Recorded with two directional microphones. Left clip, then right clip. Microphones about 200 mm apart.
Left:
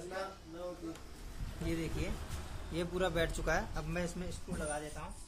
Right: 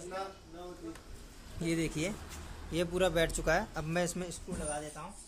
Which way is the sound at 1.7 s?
60° right (ahead or behind).